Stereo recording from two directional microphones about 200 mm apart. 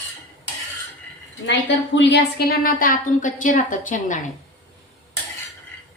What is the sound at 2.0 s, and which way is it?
A woman's voice, 55° left (ahead or behind).